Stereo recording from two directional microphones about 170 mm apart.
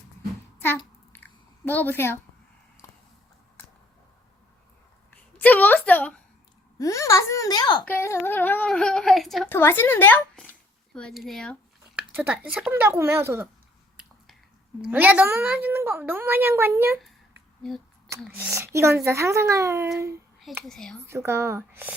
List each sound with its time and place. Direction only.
1.1 s a sound: 10° left (ahead or behind)
5.1 s a sound: 10° left (ahead or behind)
6.7 s a child's voice: 20° left (ahead or behind); by 9.5 s centre (ahead or behind)
9.5 s a woman's voice: 15° left (ahead or behind)
11.9 s a woman's voice: 10° right (ahead or behind)
14.8 s a woman's voice: 10° right (ahead or behind)
18.3 s a woman's voice: 10° right (ahead or behind)
20.7 s a woman's voice: 5° left (ahead or behind)
21.0 s a woman's voice: 15° right (ahead or behind)